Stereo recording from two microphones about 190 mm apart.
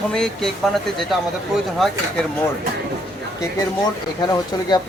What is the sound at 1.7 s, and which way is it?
Speech, centre (ahead or behind).